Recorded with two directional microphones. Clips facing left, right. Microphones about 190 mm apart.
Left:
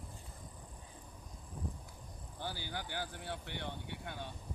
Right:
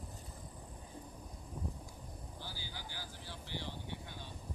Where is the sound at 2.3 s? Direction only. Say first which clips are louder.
Left 9 dB; 60° left (ahead or behind).